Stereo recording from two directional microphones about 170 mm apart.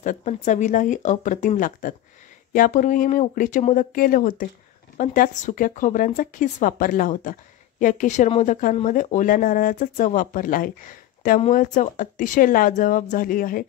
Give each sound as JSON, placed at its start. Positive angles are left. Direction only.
{"t": 0.0, "sound": "speech", "side_deg": 45}